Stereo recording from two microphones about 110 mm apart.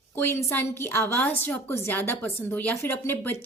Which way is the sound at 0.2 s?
25° left (ahead or behind).